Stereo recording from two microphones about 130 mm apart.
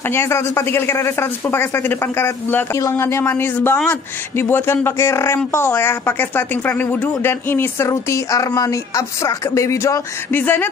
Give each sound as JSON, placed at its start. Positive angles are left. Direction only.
{"t": 0.0, "sound": "speech", "side_deg": 20}